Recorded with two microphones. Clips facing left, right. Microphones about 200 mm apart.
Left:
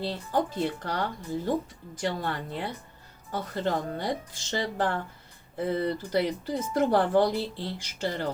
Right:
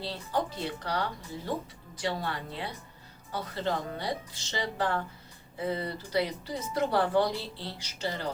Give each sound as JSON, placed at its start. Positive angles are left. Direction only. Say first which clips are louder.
{"t": 0.0, "sound": "speech", "louder": "left 4 dB", "side_deg": 45}